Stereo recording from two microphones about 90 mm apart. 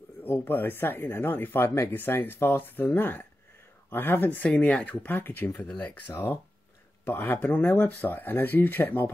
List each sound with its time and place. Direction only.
0.2 s speech: 25° left (ahead or behind)